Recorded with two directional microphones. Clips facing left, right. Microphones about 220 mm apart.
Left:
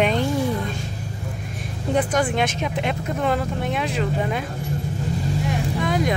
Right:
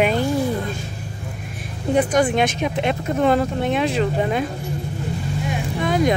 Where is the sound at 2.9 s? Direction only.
30° right (ahead or behind).